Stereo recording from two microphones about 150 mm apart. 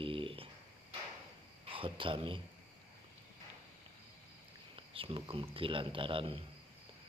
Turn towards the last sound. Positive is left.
turn(degrees=-35)  # may be behind; listen again after turning